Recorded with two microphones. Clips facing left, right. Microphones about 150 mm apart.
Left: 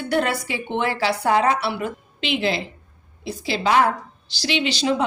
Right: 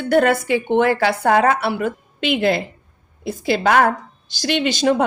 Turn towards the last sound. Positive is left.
turn(degrees=-50)  # may be behind; listen again after turning